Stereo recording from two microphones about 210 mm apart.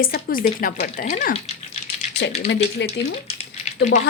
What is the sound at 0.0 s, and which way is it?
Speech, 45° left (ahead or behind).